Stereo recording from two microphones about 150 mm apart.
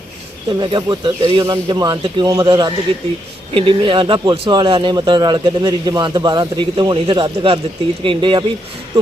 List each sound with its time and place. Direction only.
0.6 s speech: 30° right (ahead or behind)